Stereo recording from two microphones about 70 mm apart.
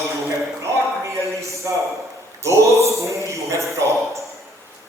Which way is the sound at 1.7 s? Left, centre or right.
Right.